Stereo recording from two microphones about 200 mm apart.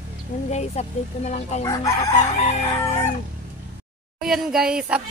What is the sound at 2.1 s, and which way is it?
Speech, 35° left (ahead or behind).